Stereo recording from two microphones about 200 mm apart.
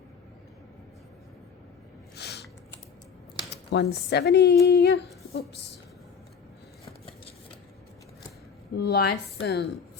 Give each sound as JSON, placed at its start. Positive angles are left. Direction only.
{"t": 2.1, "sound": "a sound", "side_deg": 55}
{"t": 3.7, "sound": "a woman's voice", "side_deg": 55}
{"t": 8.7, "sound": "a woman's voice", "side_deg": 55}